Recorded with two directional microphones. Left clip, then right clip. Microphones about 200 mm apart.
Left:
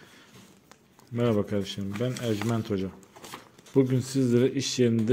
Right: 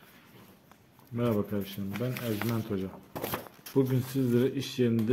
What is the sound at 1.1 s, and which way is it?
Speech, 35° left (ahead or behind).